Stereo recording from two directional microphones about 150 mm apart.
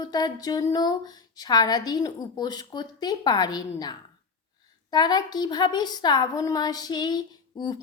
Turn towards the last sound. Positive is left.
turn(degrees=30)  # may be behind; listen again after turning